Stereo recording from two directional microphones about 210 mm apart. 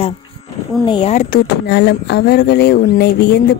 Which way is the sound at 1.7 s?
50° left (ahead or behind).